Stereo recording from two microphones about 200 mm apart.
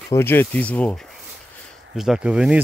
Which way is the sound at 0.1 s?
10° left (ahead or behind).